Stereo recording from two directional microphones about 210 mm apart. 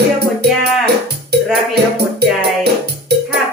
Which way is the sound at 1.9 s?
50° right (ahead or behind).